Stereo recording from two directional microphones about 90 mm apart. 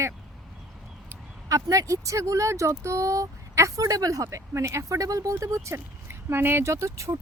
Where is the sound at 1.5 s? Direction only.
40° right (ahead or behind).